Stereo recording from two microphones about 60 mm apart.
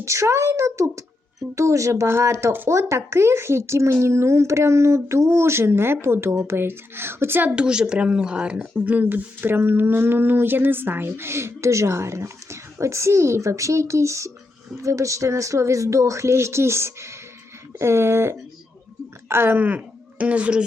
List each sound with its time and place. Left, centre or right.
0.0 s speech: right
7.4 s a woman's voice: centre
8.8 s speech: right
19.5 s speech: right